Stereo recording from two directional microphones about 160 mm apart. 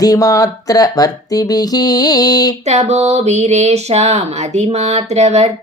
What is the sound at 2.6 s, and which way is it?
Speech, 45° right (ahead or behind).